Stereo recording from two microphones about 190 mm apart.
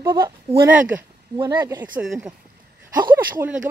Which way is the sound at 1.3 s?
20° right (ahead or behind).